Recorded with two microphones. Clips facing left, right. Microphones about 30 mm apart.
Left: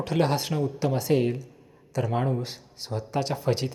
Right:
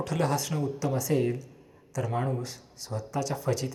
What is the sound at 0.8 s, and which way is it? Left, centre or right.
A man's voice, left.